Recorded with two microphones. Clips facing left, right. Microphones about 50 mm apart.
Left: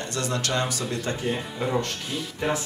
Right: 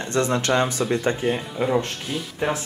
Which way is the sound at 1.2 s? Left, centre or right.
Centre.